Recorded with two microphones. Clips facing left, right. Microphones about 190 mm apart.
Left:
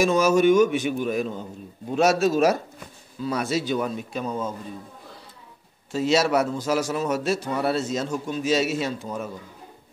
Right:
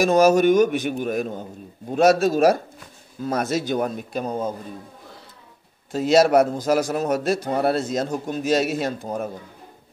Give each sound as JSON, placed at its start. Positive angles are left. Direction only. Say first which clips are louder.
{"t": 0.2, "sound": "a man's voice", "louder": "right 2 dB", "side_deg": -40}
{"t": 5.9, "sound": "a man's voice", "louder": "right 4 dB", "side_deg": -50}